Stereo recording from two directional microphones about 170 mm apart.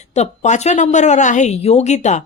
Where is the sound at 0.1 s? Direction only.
45° left (ahead or behind).